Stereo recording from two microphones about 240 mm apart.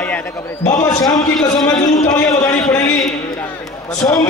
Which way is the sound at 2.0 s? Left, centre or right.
Centre.